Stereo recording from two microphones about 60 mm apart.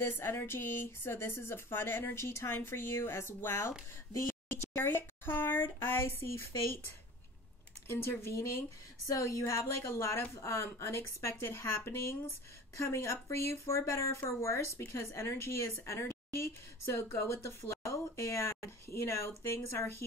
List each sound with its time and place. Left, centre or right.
0.0 s a woman's voice: left
7.9 s a woman's voice: left
9.1 s speech: left
9.5 s a woman's voice: left